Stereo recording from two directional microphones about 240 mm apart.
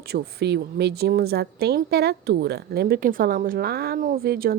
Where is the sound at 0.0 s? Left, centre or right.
Right.